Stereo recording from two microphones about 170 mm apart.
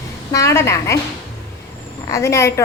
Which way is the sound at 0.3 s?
15° left (ahead or behind).